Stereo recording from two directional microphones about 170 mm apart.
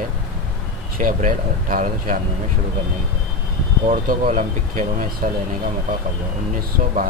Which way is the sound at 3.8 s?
50° right (ahead or behind).